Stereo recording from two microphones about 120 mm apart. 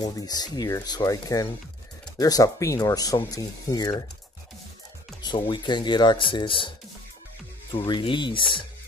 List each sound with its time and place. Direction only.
0.0 s speech: 30° left (ahead or behind)
5.2 s speech: 40° left (ahead or behind)
8.0 s speech: 45° left (ahead or behind)